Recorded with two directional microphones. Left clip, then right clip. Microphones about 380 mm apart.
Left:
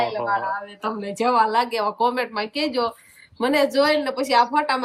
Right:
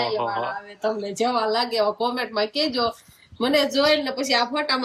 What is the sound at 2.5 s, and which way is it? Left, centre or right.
Speech, centre.